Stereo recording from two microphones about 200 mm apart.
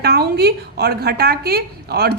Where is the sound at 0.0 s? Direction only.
55° right (ahead or behind).